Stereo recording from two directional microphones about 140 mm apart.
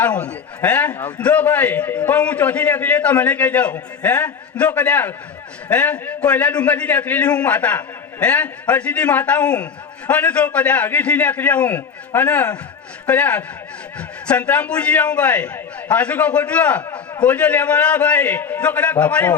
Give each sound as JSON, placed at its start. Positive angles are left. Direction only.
{"t": 0.0, "sound": "a man's voice", "side_deg": 10}